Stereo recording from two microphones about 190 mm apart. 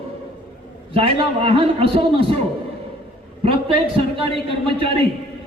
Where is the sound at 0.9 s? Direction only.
30° right (ahead or behind).